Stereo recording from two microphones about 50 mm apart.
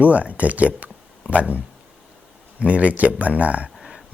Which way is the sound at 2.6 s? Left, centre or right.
Right.